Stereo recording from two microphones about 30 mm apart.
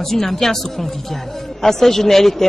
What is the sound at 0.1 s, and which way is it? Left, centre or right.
A woman's voice, centre.